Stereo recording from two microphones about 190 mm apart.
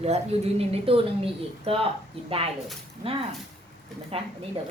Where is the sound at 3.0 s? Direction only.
30° right (ahead or behind).